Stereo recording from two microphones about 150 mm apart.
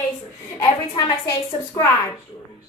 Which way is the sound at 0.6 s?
25° left (ahead or behind).